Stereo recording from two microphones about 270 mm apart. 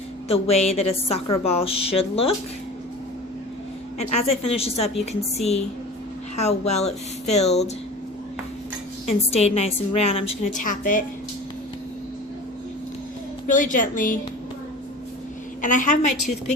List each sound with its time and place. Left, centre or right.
0.3 s speech: left
3.9 s speech: left
9.0 s speech: left
13.5 s speech: left
15.6 s speech: left